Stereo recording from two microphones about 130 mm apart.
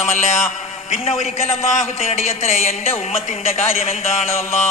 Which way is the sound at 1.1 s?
55° left (ahead or behind).